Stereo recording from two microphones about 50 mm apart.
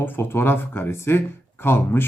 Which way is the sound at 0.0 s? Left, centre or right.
Left.